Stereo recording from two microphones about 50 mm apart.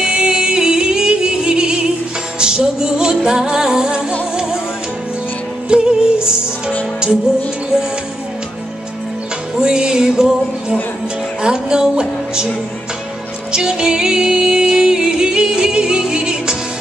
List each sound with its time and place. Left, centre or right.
0.0 s music: centre
5.7 s music: centre
9.6 s music: centre
13.5 s music: centre